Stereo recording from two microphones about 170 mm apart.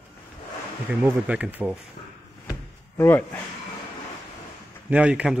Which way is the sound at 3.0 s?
10° left (ahead or behind).